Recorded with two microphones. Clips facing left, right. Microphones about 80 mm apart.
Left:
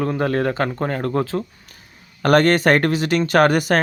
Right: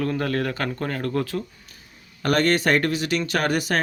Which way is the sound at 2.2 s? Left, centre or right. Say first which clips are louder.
Left 6 dB; left.